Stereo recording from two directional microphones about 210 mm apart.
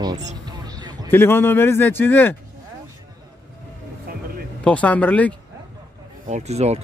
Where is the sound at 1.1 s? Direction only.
10° left (ahead or behind).